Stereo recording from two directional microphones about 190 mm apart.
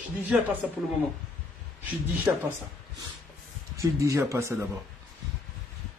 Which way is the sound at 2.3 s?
5° right (ahead or behind).